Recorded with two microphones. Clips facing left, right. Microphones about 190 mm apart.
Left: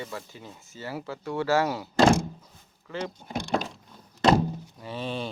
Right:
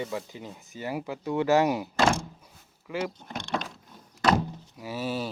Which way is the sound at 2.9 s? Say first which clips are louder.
Right 2 dB; 10° right (ahead or behind).